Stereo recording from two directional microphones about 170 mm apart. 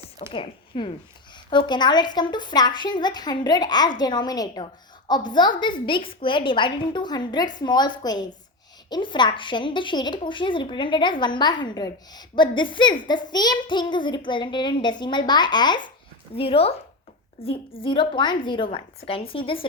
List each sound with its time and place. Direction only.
0.3 s a woman's voice: 35° left (ahead or behind)